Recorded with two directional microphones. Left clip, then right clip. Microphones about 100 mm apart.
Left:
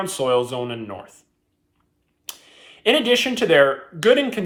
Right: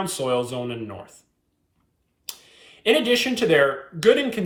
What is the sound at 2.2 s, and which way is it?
Speech, 20° left (ahead or behind).